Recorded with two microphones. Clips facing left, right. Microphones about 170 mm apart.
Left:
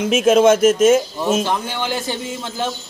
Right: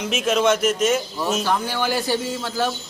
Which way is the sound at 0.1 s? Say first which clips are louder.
Left 7 dB; 50° left (ahead or behind).